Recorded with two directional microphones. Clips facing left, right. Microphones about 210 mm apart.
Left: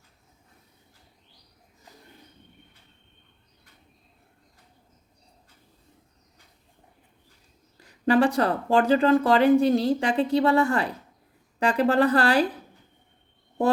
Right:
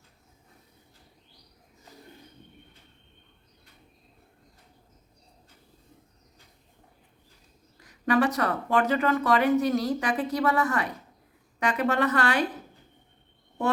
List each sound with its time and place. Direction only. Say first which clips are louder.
7.8 s speech: left 3 dB; 30° left (ahead or behind)